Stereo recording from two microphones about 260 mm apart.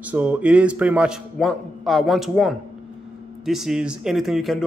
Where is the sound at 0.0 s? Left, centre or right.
Centre.